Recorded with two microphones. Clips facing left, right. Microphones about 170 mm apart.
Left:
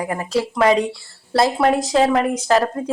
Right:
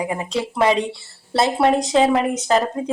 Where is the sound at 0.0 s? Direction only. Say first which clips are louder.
Even; 15° right (ahead or behind).